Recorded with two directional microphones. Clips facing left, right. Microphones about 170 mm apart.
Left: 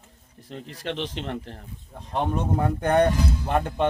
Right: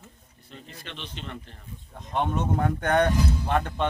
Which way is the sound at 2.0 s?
35° left (ahead or behind).